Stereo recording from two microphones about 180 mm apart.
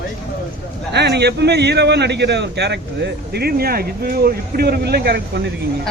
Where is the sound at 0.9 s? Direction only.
70° right (ahead or behind).